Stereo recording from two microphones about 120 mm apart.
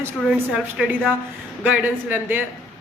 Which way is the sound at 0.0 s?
20° right (ahead or behind).